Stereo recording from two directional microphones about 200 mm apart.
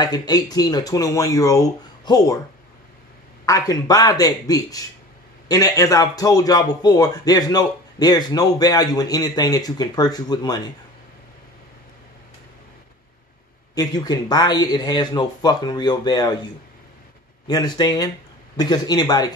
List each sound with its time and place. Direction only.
0.0 s speech: 20° left (ahead or behind)
3.4 s a man's voice: 15° left (ahead or behind)
13.7 s a man's voice: 20° left (ahead or behind)
17.5 s a man's voice: 20° left (ahead or behind)